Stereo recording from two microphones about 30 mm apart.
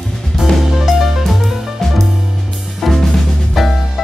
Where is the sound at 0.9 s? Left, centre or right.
Centre.